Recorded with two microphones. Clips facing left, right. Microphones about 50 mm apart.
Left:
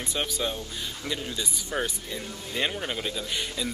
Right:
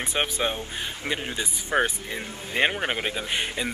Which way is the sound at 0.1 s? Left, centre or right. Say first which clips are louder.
Right 3 dB; right.